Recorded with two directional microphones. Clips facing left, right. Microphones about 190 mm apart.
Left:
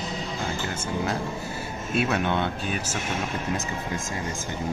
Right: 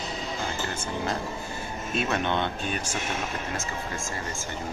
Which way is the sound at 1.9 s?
10° left (ahead or behind).